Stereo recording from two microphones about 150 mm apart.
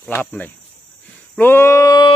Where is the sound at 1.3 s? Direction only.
15° left (ahead or behind).